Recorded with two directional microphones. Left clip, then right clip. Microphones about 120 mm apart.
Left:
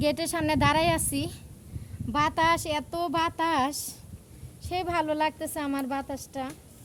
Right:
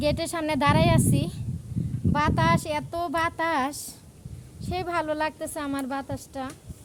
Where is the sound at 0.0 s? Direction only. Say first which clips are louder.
Right 1 dB; 25° left (ahead or behind).